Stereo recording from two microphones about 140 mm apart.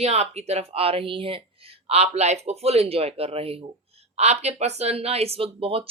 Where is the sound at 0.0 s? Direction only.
50° right (ahead or behind).